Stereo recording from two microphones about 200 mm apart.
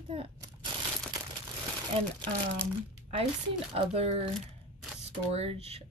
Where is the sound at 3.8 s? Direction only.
30° right (ahead or behind).